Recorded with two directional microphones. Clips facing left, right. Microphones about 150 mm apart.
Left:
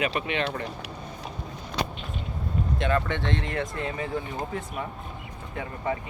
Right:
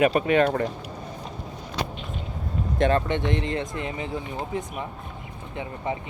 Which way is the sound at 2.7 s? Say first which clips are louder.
Right 5 dB; 40° right (ahead or behind).